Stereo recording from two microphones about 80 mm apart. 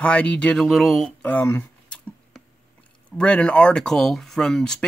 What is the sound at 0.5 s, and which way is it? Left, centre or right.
Speech, centre.